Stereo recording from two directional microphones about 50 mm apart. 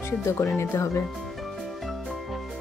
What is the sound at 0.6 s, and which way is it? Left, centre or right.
Speech, left.